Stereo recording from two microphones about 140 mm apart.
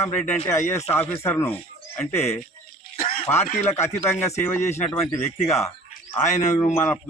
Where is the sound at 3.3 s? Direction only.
15° left (ahead or behind).